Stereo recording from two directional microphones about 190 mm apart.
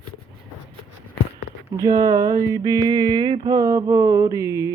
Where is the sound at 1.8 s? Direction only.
20° right (ahead or behind).